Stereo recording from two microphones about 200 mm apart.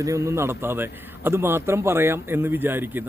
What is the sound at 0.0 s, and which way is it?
A man's voice, 15° right (ahead or behind).